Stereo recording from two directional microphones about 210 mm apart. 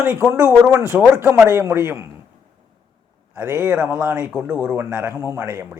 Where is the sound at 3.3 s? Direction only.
10° right (ahead or behind).